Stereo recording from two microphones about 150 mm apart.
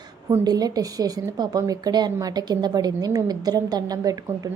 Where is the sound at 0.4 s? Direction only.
25° right (ahead or behind).